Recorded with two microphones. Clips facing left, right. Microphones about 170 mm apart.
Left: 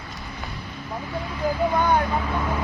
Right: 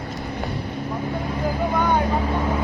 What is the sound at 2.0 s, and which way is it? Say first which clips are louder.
Vehicle: right 3 dB; 35° right (ahead or behind).